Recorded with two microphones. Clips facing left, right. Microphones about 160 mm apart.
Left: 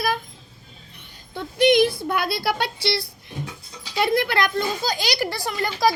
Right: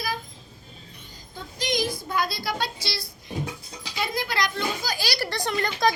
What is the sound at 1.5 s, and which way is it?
Speech, 65° left (ahead or behind).